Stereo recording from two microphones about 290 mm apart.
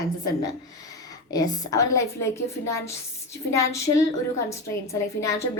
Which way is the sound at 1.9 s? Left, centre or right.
Centre.